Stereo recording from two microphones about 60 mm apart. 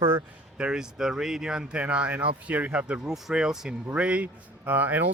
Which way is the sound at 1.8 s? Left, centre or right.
Right.